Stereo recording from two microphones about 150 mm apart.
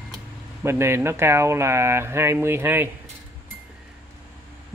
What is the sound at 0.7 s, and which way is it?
Speech, 15° right (ahead or behind).